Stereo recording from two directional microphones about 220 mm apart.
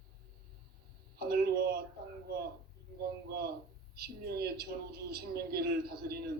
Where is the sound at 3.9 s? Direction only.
45° right (ahead or behind).